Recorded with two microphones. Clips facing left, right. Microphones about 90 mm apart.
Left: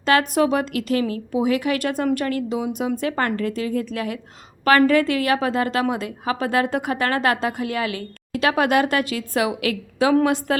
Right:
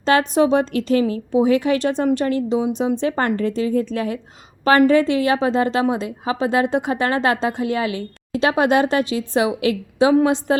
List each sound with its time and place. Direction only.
0.0 s a woman's voice: 25° right (ahead or behind)